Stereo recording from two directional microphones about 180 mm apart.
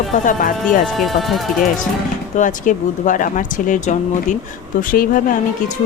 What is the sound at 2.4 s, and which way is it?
Speech, 45° left (ahead or behind).